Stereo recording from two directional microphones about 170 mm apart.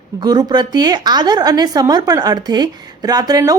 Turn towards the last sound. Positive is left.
turn(degrees=-20)  # may be behind; listen again after turning